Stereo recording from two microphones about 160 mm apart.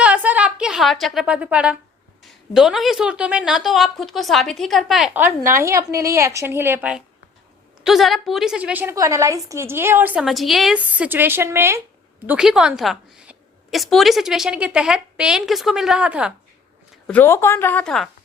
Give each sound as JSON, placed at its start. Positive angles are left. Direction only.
{"t": 0.0, "sound": "a sound", "side_deg": -10}
{"t": 2.2, "sound": "a woman's voice", "side_deg": -5}
{"t": 7.9, "sound": "a woman's voice", "side_deg": 0}
{"t": 17.1, "sound": "speech", "side_deg": 15}